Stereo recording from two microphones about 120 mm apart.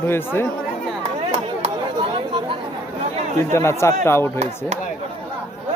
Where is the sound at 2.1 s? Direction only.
45° right (ahead or behind).